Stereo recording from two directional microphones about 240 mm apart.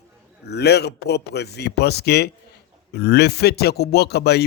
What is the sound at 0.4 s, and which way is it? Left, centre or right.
Speech, left.